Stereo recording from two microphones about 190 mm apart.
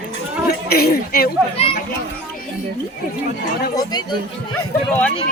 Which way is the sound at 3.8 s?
20° left (ahead or behind).